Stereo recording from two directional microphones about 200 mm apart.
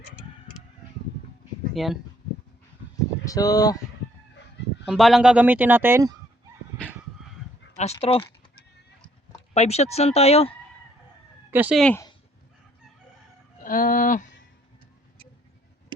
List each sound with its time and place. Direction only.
1.7 s speech: centre (ahead or behind)
3.2 s speech: 20° left (ahead or behind)
4.9 s speech: centre (ahead or behind)
7.9 s speech: 25° left (ahead or behind)
9.6 s speech: 30° left (ahead or behind)
11.5 s speech: 10° right (ahead or behind)
11.8 s speech: 5° left (ahead or behind)
13.6 s a sound: 45° left (ahead or behind)